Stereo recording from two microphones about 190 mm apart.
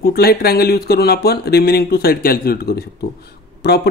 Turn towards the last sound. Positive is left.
turn(degrees=60)  # may be behind; listen again after turning